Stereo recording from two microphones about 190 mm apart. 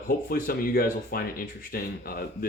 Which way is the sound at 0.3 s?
50° left (ahead or behind).